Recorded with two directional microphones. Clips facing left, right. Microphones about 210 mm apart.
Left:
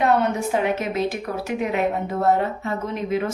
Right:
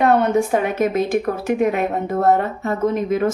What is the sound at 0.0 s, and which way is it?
A woman's voice, 50° right (ahead or behind).